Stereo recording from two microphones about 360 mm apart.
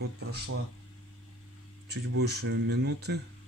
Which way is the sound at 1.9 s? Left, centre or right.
Right.